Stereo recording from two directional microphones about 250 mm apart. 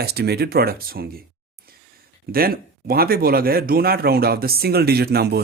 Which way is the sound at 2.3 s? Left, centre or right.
Right.